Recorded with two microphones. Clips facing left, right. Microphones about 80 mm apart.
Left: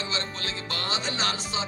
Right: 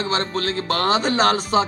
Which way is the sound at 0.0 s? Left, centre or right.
Right.